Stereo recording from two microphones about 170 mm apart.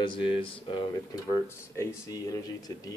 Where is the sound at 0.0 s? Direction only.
30° left (ahead or behind).